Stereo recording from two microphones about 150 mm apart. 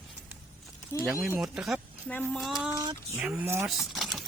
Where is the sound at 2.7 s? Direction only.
25° right (ahead or behind).